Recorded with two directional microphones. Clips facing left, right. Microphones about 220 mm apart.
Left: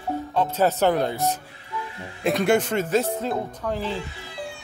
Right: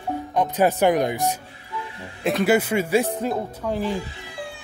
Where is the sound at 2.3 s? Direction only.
5° right (ahead or behind).